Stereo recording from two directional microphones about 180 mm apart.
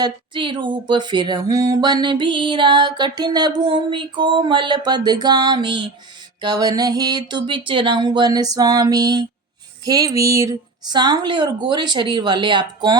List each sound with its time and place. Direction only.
0.0 s speech: 25° right (ahead or behind)